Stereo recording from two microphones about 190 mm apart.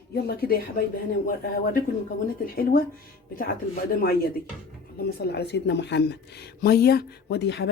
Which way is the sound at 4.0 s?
55° left (ahead or behind).